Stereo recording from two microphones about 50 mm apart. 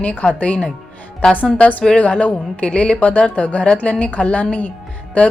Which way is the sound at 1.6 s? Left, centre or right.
Left.